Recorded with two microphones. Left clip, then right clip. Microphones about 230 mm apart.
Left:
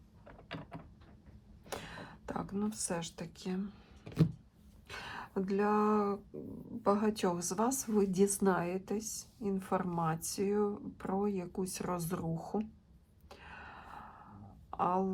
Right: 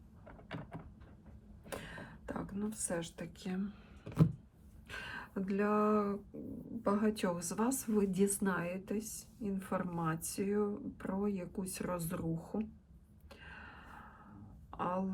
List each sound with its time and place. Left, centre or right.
0.3 s door: centre
2.6 s speech: centre
4.9 s speech: centre
12.4 s speech: left
13.4 s a sound: centre